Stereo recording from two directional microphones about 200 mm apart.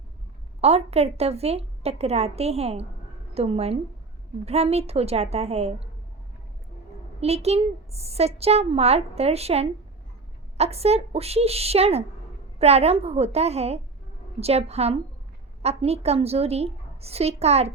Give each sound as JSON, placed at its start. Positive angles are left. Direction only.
{"t": 0.6, "sound": "a woman's voice", "side_deg": -30}
{"t": 7.2, "sound": "a woman's voice", "side_deg": -30}